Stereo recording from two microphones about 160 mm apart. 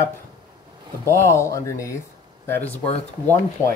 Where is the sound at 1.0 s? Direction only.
15° left (ahead or behind).